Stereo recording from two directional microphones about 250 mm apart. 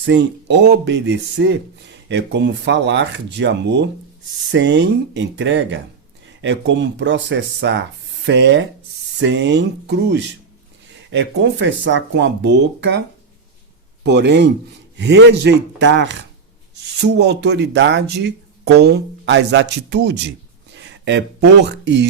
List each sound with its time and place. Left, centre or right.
0.0 s speech: right
14.0 s speech: right